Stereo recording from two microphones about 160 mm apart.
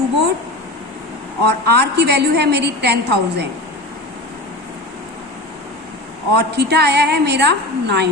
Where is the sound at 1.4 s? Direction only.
90° right.